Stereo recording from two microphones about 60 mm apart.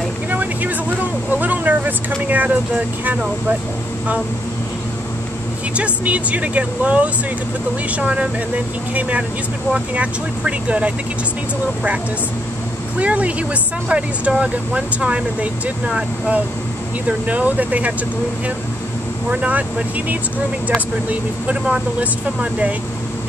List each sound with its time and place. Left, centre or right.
0.3 s vehicle: right
1.3 s speech: right
5.8 s speech: right
9.7 s speech: centre
12.9 s speech: right
21.1 s speech: right